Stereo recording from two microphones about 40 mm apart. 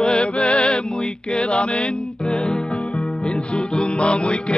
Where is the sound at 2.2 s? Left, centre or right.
Centre.